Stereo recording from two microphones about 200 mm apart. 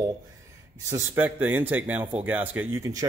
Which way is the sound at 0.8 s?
10° right (ahead or behind).